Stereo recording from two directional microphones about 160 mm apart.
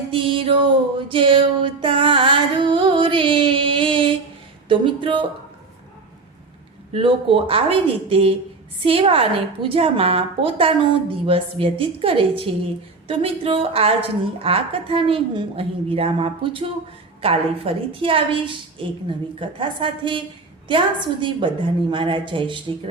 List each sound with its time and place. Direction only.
0.1 s music: 35° right (ahead or behind)
4.7 s a sound: 30° right (ahead or behind)
6.9 s a woman's voice: 35° right (ahead or behind)